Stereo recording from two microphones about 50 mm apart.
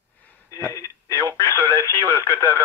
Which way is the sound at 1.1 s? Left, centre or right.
Left.